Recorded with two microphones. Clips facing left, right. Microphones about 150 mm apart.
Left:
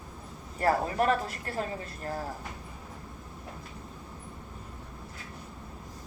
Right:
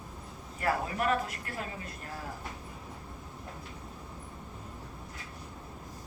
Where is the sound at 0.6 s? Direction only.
35° left (ahead or behind).